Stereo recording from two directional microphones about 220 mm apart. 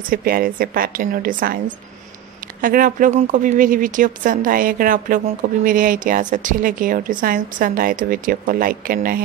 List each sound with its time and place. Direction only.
0.1 s speech: 40° right (ahead or behind)
2.6 s speech: 40° right (ahead or behind)